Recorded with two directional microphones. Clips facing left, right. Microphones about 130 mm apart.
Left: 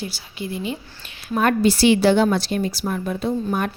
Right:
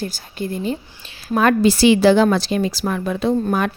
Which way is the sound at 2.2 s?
90° right.